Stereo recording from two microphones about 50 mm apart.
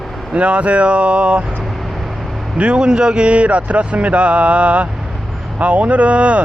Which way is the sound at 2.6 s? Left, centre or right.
Centre.